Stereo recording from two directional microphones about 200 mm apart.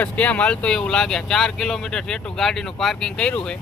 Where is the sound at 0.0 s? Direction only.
5° left (ahead or behind).